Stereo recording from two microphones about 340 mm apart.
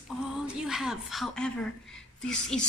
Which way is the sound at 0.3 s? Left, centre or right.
Centre.